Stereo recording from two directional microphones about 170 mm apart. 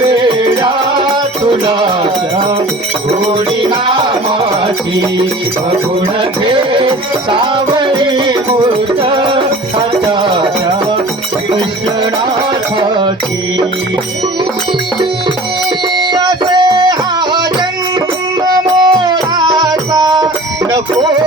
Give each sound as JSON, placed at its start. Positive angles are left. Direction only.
{"t": 0.2, "sound": "music", "side_deg": -25}
{"t": 6.4, "sound": "music", "side_deg": -30}
{"t": 9.0, "sound": "music", "side_deg": -30}
{"t": 16.1, "sound": "music", "side_deg": -25}
{"t": 18.4, "sound": "music", "side_deg": -25}